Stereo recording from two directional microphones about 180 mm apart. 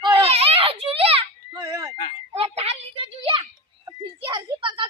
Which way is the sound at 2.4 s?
35° right (ahead or behind).